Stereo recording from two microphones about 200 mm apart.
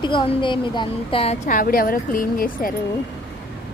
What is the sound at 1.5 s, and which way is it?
Speech, 45° left (ahead or behind).